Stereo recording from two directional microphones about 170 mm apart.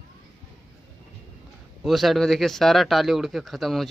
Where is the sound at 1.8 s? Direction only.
Centre (ahead or behind).